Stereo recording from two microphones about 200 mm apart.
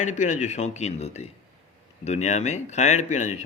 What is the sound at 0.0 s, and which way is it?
A man's voice, 35° left (ahead or behind).